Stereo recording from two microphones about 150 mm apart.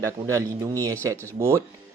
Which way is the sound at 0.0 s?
20° right (ahead or behind).